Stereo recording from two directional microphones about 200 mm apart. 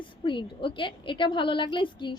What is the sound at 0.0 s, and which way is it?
A woman's voice, 25° left (ahead or behind).